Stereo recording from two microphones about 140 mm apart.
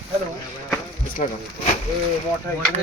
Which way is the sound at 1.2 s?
65° left (ahead or behind).